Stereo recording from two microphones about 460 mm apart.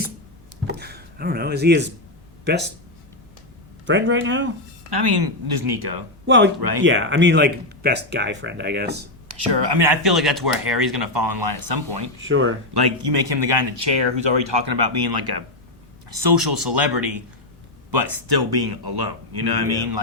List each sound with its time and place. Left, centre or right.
0.8 s a sound: right
2.4 s speech: right
3.8 s speech: right
4.9 s speech: right
6.2 s speech: right
6.6 s speech: right
6.8 s speech: right
9.3 s speech: right
10.1 s speech: centre
10.9 s speech: right
12.2 s speech: right
12.7 s speech: right